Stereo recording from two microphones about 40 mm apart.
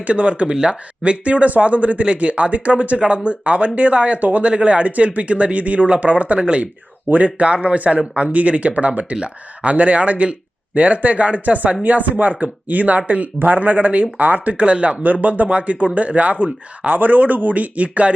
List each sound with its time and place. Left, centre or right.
0.0 s speech: right
4.5 s speech: right
15.0 s speech: right